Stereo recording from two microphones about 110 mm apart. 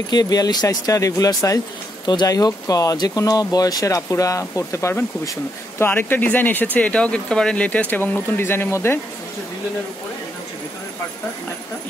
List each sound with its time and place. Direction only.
0.1 s speech: 35° left (ahead or behind); by 9.0 s 20° left (ahead or behind)